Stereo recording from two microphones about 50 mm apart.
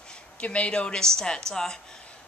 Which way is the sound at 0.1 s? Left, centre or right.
Left.